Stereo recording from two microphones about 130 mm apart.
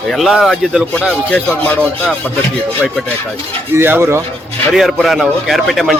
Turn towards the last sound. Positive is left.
turn(degrees=0)  # may be behind; listen again after turning